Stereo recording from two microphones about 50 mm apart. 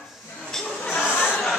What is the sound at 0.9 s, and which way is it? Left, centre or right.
Chatter, left.